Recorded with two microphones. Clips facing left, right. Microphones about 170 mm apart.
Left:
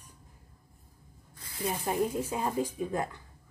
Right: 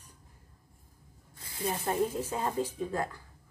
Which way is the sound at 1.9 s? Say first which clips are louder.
Left 1 dB; 10° left (ahead or behind).